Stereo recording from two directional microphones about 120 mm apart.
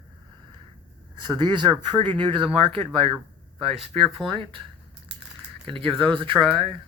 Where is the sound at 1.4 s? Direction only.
40° right (ahead or behind).